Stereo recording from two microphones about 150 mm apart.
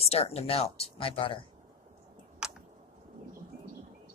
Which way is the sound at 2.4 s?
5° right (ahead or behind).